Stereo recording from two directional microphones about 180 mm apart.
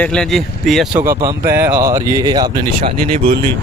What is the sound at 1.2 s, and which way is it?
Speech, 15° right (ahead or behind).